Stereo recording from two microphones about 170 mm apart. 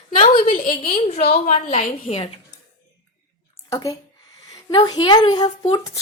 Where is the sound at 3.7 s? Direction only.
20° left (ahead or behind).